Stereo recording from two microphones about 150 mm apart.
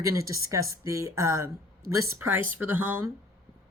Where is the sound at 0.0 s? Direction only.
20° right (ahead or behind).